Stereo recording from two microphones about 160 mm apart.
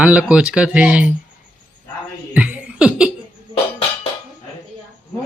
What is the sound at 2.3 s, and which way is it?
Chuckle, 10° right (ahead or behind).